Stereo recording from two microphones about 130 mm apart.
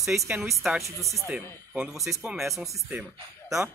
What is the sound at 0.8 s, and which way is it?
Speech, 25° right (ahead or behind).